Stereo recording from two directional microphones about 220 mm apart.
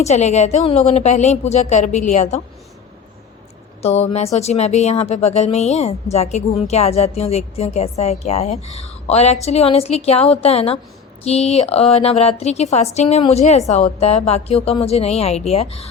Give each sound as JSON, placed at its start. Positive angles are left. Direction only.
{"t": 0.0, "sound": "a woman's voice", "side_deg": 30}
{"t": 3.8, "sound": "speech", "side_deg": 30}